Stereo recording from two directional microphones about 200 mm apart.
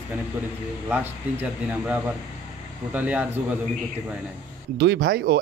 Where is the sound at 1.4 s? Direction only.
10° right (ahead or behind).